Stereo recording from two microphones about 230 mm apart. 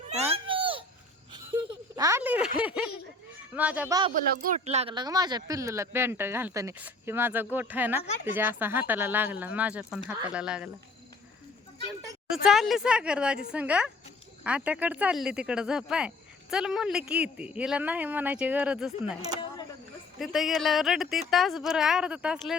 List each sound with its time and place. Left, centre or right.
0.1 s a sound: right
2.0 s a sound: centre
3.5 s speech: centre
4.6 s speech: right; by 10.7 s centre
12.3 s speech: centre
20.1 s speech: centre